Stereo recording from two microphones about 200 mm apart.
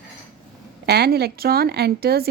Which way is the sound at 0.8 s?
55° right (ahead or behind).